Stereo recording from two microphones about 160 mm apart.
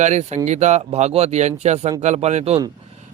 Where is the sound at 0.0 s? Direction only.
45° right (ahead or behind).